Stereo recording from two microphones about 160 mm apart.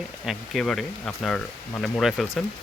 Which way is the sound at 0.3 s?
Centre (ahead or behind).